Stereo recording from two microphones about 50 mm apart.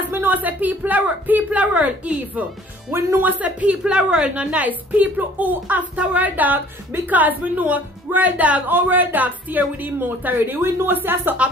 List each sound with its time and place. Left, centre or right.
0.2 s a woman's voice: right; by 4.5 s centre
4.5 s a woman's voice: right